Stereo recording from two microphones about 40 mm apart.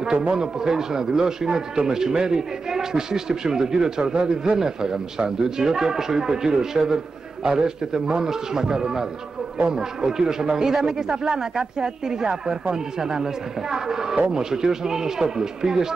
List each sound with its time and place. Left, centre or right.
0.3 s a man's voice: centre